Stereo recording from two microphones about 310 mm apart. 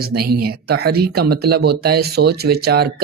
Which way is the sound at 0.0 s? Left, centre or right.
Right.